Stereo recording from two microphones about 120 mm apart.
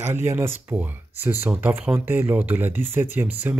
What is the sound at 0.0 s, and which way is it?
Speech, 20° right (ahead or behind).